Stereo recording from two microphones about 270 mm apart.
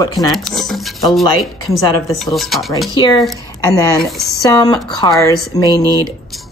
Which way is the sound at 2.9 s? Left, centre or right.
Centre.